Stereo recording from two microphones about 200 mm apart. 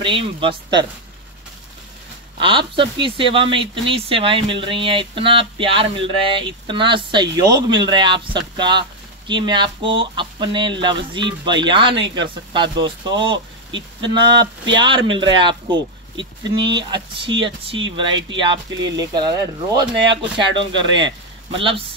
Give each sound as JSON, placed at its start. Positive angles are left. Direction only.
{"t": 0.0, "sound": "speech", "side_deg": -25}
{"t": 2.3, "sound": "speech", "side_deg": -25}